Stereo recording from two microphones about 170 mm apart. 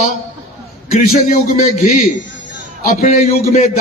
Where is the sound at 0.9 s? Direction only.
50° left (ahead or behind).